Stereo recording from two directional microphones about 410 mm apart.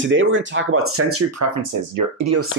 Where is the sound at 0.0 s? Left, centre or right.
Right.